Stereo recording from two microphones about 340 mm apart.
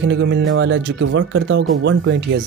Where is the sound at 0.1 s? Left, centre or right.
Right.